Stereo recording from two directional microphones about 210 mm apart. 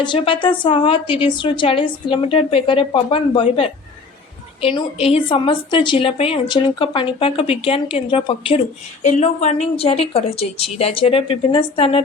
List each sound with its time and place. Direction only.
0.0 s a woman's voice: 25° left (ahead or behind)